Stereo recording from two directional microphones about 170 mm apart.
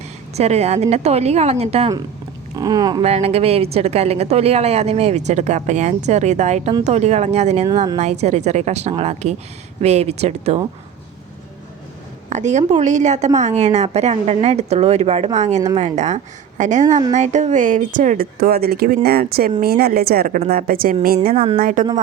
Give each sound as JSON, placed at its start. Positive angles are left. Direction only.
{"t": 0.3, "sound": "a woman's voice", "side_deg": -40}
{"t": 2.6, "sound": "speech", "side_deg": -20}
{"t": 3.0, "sound": "a woman's voice", "side_deg": -40}
{"t": 12.3, "sound": "a woman's voice", "side_deg": -45}
{"t": 21.3, "sound": "a woman's voice", "side_deg": -35}
{"t": 21.6, "sound": "speech", "side_deg": -50}